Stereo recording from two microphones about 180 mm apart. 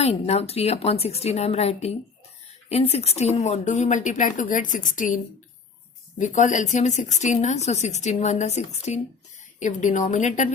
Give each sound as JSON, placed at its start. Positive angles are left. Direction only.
{"t": 0.0, "sound": "speech", "side_deg": 35}